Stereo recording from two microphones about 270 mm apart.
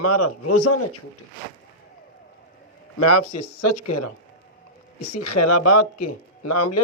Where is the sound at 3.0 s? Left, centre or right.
Left.